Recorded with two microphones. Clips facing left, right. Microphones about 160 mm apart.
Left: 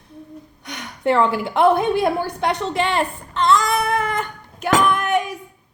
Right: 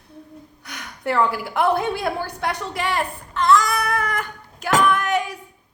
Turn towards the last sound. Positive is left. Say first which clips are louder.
# left 1 dB
turn(degrees=20)  # may be behind; listen again after turning